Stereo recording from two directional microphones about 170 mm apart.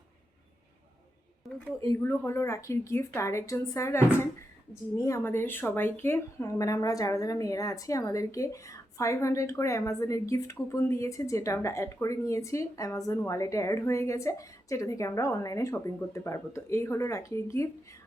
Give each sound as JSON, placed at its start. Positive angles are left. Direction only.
{"t": 2.0, "sound": "speech", "side_deg": 15}